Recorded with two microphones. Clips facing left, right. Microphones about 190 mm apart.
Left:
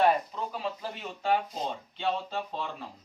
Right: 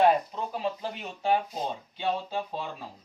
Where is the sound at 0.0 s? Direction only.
25° right (ahead or behind).